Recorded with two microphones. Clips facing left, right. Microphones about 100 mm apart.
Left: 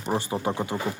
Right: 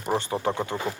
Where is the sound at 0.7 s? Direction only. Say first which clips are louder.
Even; 15° left (ahead or behind).